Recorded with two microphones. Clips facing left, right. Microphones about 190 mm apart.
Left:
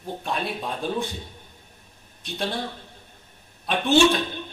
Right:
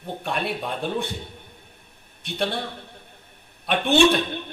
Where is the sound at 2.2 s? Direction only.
60° right (ahead or behind).